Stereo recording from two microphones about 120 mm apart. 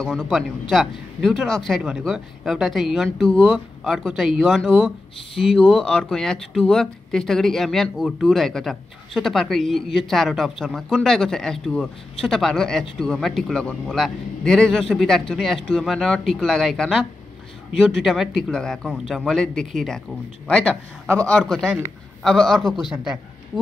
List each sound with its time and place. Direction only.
0.0 s a man's voice: centre (ahead or behind)